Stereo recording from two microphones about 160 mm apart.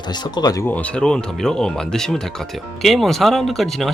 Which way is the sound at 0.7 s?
5° left (ahead or behind).